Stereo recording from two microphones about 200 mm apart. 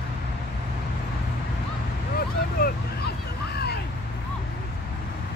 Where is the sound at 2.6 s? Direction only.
50° left (ahead or behind).